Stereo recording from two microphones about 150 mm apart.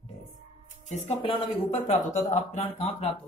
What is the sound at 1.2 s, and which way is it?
Speech, 35° left (ahead or behind).